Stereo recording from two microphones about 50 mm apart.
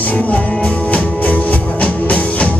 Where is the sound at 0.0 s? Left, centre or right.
Left.